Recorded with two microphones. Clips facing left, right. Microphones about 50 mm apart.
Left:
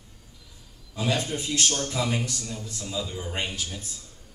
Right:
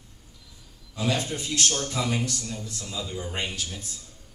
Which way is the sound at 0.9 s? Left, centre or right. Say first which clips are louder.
Even; centre.